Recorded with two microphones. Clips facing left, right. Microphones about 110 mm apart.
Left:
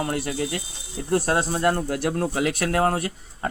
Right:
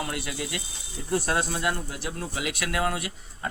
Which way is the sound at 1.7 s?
55° left (ahead or behind).